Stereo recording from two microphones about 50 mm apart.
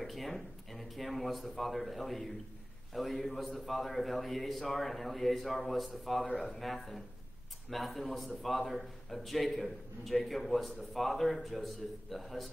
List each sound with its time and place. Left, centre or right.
0.0 s a man's voice: centre
6.2 s speech: left
6.5 s a man's voice: centre